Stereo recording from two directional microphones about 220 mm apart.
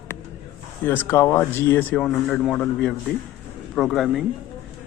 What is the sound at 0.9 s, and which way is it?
A man's voice, 10° left (ahead or behind).